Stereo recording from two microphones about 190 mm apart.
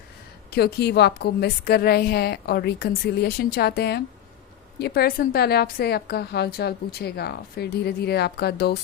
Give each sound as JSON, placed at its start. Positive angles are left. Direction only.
{"t": 0.5, "sound": "a woman's voice", "side_deg": 60}